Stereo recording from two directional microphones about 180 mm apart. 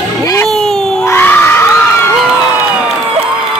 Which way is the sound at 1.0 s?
10° left (ahead or behind).